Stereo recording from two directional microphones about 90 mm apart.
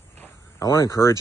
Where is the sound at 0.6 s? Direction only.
40° left (ahead or behind).